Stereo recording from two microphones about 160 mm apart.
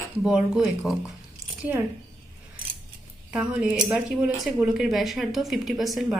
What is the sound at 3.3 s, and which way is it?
A woman's voice, 5° right (ahead or behind).